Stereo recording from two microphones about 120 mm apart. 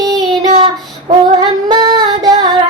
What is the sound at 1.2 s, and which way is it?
Female singing, 40° right (ahead or behind).